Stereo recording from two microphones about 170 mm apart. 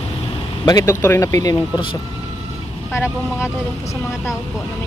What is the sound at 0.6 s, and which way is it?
Speech, 20° left (ahead or behind).